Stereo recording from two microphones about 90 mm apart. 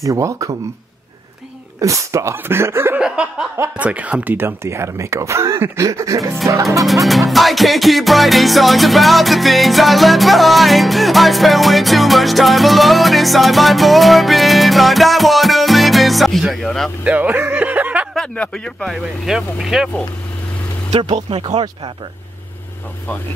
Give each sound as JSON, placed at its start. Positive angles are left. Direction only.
{"t": 0.0, "sound": "speech", "side_deg": -35}
{"t": 1.8, "sound": "speech", "side_deg": -35}
{"t": 3.0, "sound": "a sound", "side_deg": -10}
{"t": 3.7, "sound": "speech", "side_deg": -15}
{"t": 7.1, "sound": "music", "side_deg": 0}
{"t": 17.0, "sound": "music", "side_deg": -15}
{"t": 18.1, "sound": "speech", "side_deg": 10}
{"t": 19.2, "sound": "music", "side_deg": -5}
{"t": 20.9, "sound": "speech", "side_deg": -75}